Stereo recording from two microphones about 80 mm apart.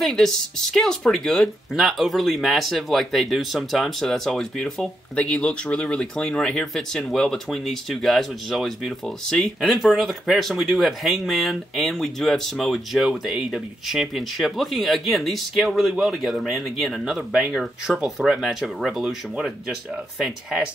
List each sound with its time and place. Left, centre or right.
0.0 s speech: centre